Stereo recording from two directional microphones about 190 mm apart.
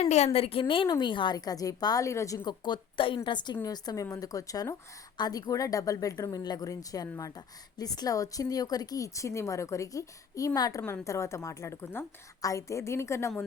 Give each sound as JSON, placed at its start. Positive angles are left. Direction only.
{"t": 0.0, "sound": "a woman's voice", "side_deg": 35}